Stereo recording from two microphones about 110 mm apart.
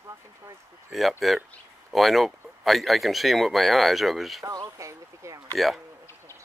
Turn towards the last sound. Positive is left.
turn(degrees=0)  # may be behind; listen again after turning